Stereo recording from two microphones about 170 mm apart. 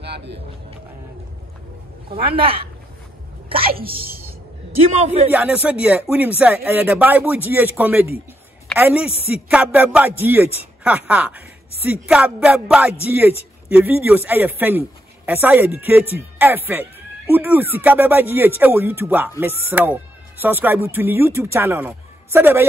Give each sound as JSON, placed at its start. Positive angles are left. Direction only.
{"t": 0.0, "sound": "music", "side_deg": -85}
{"t": 3.6, "sound": "a woman's voice", "side_deg": -60}
{"t": 4.9, "sound": "a man's voice", "side_deg": -40}
{"t": 5.3, "sound": "speech", "side_deg": -10}